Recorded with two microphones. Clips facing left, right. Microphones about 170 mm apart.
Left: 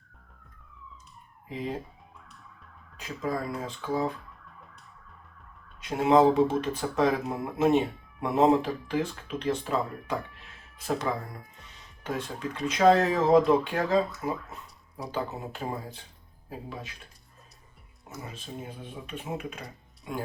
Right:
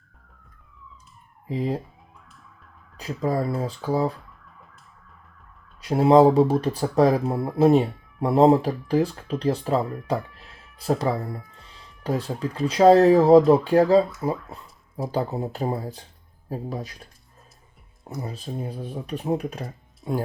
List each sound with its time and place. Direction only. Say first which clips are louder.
1.5 s speech: right 7 dB; 35° right (ahead or behind)
3.0 s speech: right 7 dB; 35° right (ahead or behind)
5.8 s speech: right 6 dB; 35° right (ahead or behind)